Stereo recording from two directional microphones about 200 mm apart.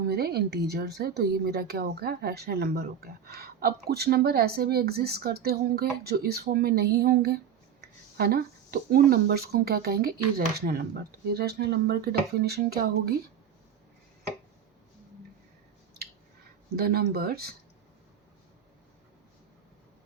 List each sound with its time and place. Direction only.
0.1 s speech: 50° right (ahead or behind)
16.7 s speech: 50° right (ahead or behind)